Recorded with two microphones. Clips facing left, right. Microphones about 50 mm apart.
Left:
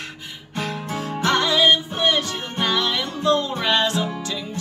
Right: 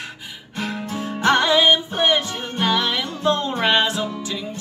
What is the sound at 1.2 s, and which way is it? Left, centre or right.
Music, right.